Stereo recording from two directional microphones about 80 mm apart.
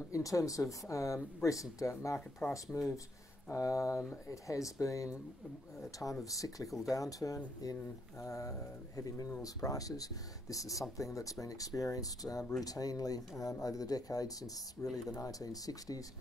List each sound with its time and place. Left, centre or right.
0.1 s speech: left
2.7 s speech: centre
3.4 s speech: left